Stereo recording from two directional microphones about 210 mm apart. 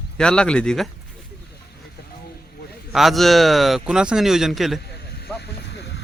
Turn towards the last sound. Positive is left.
turn(degrees=55)  # may be behind; listen again after turning